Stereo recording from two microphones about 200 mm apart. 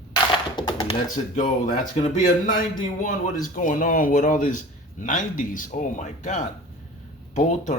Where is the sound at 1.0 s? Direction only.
40° left (ahead or behind).